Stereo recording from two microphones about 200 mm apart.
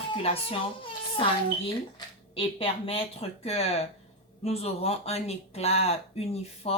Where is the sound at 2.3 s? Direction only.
30° left (ahead or behind).